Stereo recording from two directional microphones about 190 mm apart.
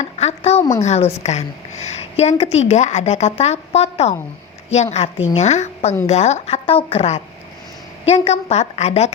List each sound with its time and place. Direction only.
0.0 s a woman's voice: 35° left (ahead or behind)